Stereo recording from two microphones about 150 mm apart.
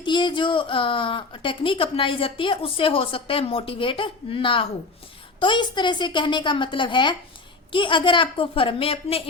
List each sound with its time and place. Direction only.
0.0 s a woman's voice: 30° left (ahead or behind)